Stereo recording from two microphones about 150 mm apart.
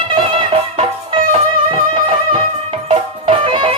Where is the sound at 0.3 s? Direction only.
40° right (ahead or behind).